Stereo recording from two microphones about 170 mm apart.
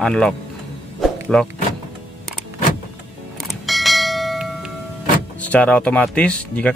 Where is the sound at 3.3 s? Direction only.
Centre (ahead or behind).